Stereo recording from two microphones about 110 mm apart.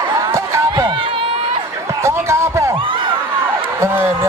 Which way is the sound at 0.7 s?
45° right (ahead or behind).